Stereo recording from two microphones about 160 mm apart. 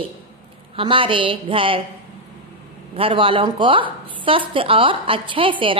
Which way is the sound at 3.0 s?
35° right (ahead or behind).